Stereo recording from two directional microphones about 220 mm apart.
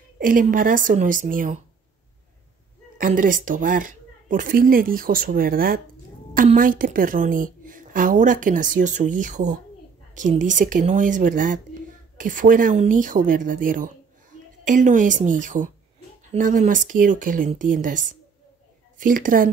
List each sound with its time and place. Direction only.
0.2 s a woman's voice: 40° right (ahead or behind)
3.0 s a woman's voice: 35° right (ahead or behind)